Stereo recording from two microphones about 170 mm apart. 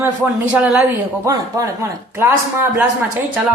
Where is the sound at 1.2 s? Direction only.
20° right (ahead or behind).